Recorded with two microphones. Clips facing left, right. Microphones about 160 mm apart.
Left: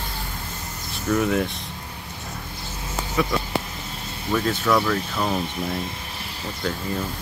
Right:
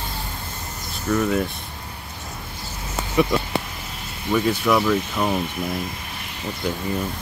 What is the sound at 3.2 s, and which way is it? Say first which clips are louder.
Speech: right 5 dB; 20° right (ahead or behind).